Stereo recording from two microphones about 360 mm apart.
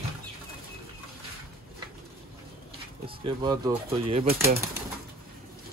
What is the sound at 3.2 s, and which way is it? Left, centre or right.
Speech, centre.